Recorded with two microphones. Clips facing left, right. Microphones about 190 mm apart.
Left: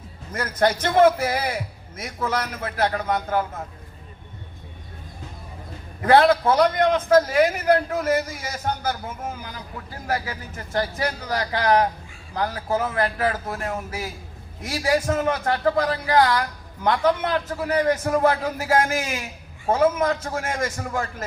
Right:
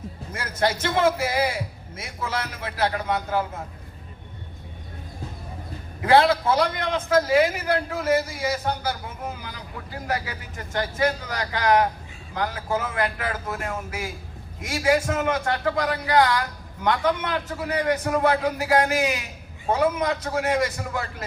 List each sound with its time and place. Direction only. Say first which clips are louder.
0.3 s a man's voice: left 4 dB; 50° left (ahead or behind)
6.1 s a man's voice: left 2 dB; 55° left (ahead or behind)
10.1 s a man's voice: left 3 dB; 40° left (ahead or behind)